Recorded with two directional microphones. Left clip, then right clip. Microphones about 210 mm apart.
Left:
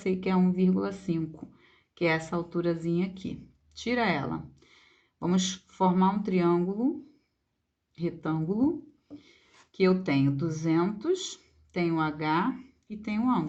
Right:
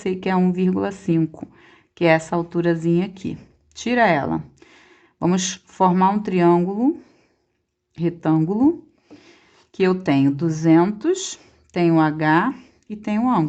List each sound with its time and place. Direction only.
0.0 s speech: 40° right (ahead or behind)
7.9 s speech: 45° right (ahead or behind)